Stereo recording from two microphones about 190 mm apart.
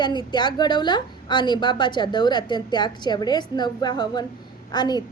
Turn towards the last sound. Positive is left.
turn(degrees=20)  # may be behind; listen again after turning